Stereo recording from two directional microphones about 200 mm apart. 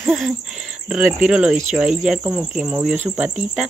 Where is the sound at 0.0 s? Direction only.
Centre (ahead or behind).